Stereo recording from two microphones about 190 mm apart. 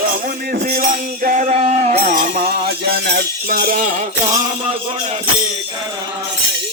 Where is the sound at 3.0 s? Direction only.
55° right (ahead or behind).